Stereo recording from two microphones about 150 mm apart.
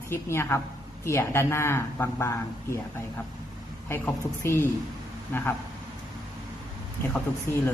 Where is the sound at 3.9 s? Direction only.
15° left (ahead or behind).